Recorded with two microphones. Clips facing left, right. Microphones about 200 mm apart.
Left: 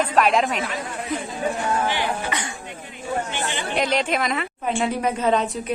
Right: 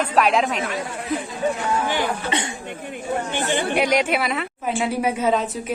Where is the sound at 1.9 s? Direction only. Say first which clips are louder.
Right 2 dB; 45° right (ahead or behind).